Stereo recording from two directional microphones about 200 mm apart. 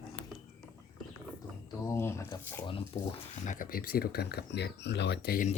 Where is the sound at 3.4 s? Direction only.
40° left (ahead or behind).